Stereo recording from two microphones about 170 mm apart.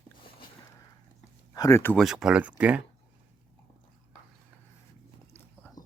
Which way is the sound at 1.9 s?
Centre (ahead or behind).